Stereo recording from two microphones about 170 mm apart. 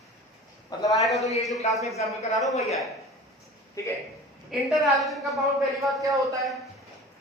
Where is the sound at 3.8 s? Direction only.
20° left (ahead or behind).